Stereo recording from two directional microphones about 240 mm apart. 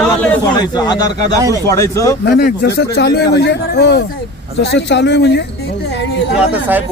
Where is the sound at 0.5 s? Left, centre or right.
Centre.